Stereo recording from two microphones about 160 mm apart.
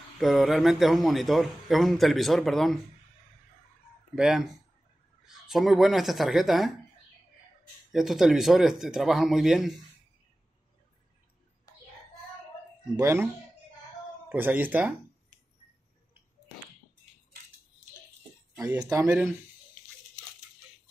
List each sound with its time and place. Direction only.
0.2 s a man's voice: centre (ahead or behind)
4.1 s a man's voice: 5° right (ahead or behind)
7.9 s a man's voice: centre (ahead or behind)
12.9 s speech: 15° right (ahead or behind)
14.3 s speech: 10° right (ahead or behind)
18.8 s speech: 20° right (ahead or behind)